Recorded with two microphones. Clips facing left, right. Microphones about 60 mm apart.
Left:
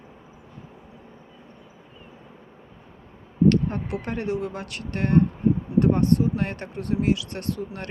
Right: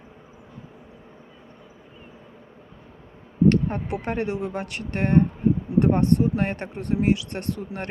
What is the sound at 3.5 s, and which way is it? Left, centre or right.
Speech, right.